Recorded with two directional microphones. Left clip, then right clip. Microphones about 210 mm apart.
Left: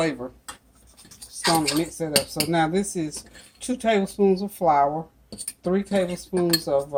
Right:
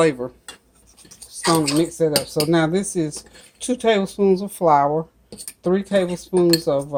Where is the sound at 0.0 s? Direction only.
40° right (ahead or behind).